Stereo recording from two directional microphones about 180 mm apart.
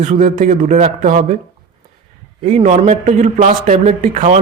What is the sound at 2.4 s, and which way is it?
A man's voice, 40° right (ahead or behind).